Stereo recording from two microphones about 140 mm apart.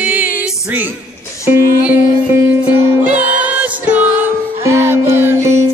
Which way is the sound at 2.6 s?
10° right (ahead or behind).